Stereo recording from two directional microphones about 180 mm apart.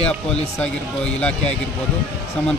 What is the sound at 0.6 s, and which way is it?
Speech, 5° left (ahead or behind).